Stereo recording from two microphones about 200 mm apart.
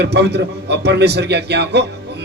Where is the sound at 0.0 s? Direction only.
55° right (ahead or behind).